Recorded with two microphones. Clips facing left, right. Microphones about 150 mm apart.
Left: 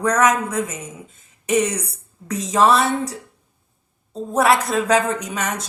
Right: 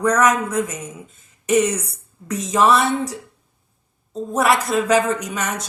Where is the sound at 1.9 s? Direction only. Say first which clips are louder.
Even; 30° left (ahead or behind).